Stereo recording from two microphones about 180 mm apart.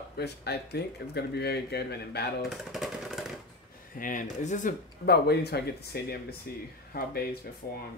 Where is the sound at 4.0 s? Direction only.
45° left (ahead or behind).